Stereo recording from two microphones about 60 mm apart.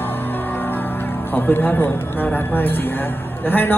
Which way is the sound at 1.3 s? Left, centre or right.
Left.